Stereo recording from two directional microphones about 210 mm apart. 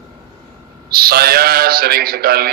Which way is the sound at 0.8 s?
45° right (ahead or behind).